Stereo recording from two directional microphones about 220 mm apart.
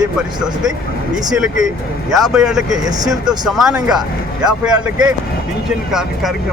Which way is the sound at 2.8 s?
15° right (ahead or behind).